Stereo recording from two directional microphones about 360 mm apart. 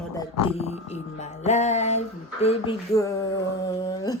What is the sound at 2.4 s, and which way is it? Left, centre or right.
Speech, centre.